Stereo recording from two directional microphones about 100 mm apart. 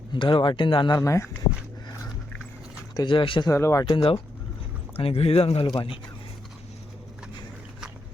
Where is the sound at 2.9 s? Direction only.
50° left (ahead or behind).